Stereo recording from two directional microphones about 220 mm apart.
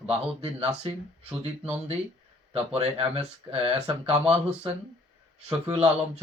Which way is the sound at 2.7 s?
30° right (ahead or behind).